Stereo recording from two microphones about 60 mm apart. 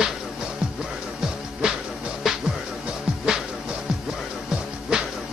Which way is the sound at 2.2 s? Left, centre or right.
Centre.